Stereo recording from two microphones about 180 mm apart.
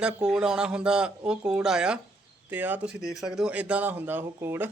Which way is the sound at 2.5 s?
10° right (ahead or behind).